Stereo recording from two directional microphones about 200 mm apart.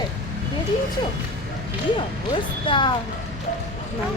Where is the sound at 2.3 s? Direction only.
25° left (ahead or behind).